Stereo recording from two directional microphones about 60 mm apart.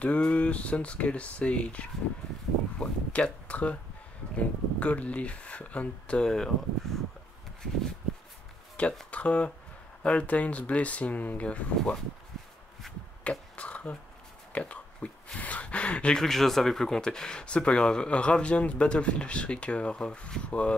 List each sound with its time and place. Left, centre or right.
0.0 s speech: left
8.8 s speech: left
13.2 s a sound: left
16.2 s speech: centre